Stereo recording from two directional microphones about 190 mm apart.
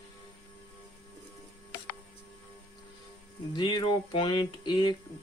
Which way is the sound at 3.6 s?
25° left (ahead or behind).